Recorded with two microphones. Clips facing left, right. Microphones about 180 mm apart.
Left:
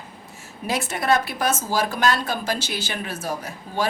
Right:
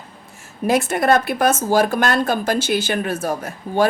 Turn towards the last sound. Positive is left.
turn(degrees=-55)  # may be behind; listen again after turning